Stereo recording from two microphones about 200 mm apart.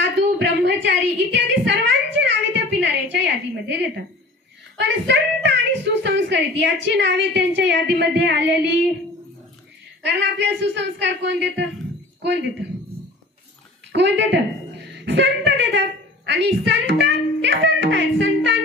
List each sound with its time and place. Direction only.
0.0 s a sound: 60° right (ahead or behind)
4.7 s a woman's voice: 60° right (ahead or behind)
10.0 s a woman's voice: 60° right (ahead or behind)
13.9 s a woman's voice: 60° right (ahead or behind)